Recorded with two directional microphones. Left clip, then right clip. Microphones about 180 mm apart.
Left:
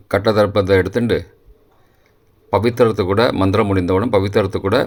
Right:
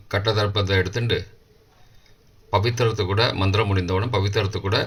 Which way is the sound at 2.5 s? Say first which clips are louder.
Left 7 dB; 55° left (ahead or behind).